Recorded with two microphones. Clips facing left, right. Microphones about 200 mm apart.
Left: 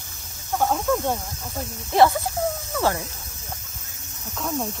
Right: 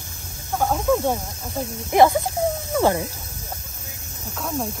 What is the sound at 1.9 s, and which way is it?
Speech, 15° right (ahead or behind).